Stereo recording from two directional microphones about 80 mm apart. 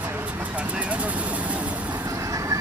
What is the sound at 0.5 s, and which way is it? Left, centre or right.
Speech, centre.